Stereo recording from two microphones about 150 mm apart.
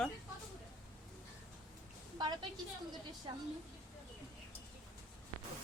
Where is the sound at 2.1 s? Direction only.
30° right (ahead or behind).